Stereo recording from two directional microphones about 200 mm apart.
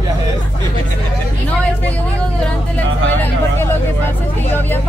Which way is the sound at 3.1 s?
10° left (ahead or behind).